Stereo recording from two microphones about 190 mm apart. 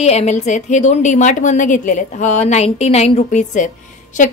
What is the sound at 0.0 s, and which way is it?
A woman's voice, 35° left (ahead or behind).